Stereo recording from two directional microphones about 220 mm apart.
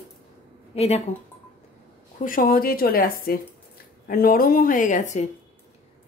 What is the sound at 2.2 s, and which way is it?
A woman's voice, 40° left (ahead or behind).